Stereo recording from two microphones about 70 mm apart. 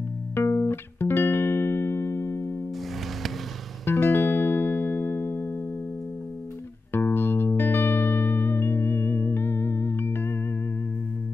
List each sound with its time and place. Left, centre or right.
0.3 s music: left
3.8 s music: left
6.9 s music: left